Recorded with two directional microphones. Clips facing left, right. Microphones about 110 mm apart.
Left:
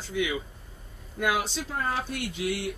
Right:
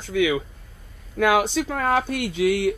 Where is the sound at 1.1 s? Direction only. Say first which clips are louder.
Right 8 dB; 80° right.